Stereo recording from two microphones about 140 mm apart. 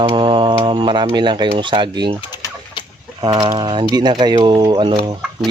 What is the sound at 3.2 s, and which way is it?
Speech, 30° right (ahead or behind).